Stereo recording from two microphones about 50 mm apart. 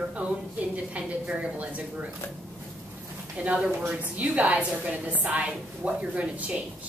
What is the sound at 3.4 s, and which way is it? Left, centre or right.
A woman's voice, right.